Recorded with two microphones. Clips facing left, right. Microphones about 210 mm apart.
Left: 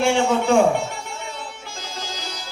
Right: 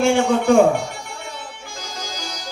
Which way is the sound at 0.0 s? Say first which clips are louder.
Right 2 dB; 50° right (ahead or behind).